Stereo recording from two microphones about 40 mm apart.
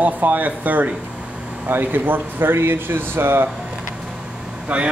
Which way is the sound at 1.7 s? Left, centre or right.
Right.